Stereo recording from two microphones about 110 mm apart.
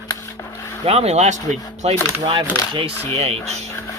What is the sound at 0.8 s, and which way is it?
Speech, 70° right (ahead or behind).